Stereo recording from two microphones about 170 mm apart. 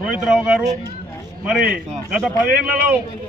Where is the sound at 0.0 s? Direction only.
5° right (ahead or behind).